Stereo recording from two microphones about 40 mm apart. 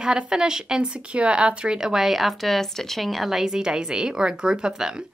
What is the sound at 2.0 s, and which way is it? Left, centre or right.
Speech, centre.